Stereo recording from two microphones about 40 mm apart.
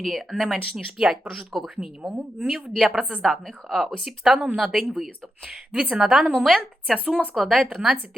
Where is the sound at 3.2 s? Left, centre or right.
Centre.